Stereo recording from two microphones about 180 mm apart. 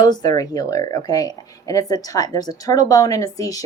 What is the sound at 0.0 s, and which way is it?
Speech, 20° left (ahead or behind).